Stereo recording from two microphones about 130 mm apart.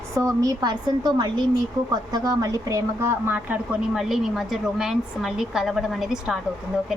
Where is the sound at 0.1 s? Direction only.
25° right (ahead or behind).